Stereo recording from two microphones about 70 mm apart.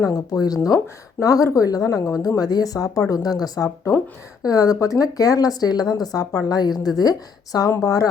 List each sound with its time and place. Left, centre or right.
0.0 s speech: left
7.7 s speech: left